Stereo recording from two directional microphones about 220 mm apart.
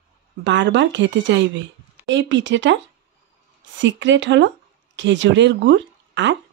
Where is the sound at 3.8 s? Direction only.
55° right (ahead or behind).